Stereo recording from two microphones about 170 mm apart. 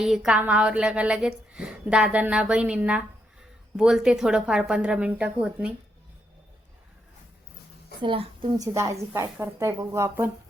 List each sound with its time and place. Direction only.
0.0 s speech: 5° right (ahead or behind)
8.0 s a woman's voice: 30° right (ahead or behind)
8.5 s speech: 20° right (ahead or behind)